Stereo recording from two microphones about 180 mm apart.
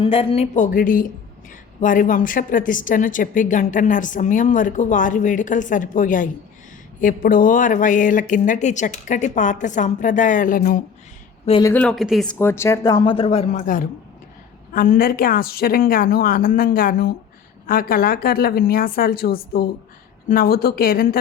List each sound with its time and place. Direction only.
0.0 s speech: 30° left (ahead or behind); by 10.8 s 50° left (ahead or behind)
11.6 s a woman's voice: 10° left (ahead or behind); by 21.2 s 55° left (ahead or behind)